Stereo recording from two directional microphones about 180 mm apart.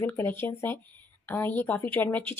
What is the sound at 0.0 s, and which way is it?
Speech, 10° left (ahead or behind).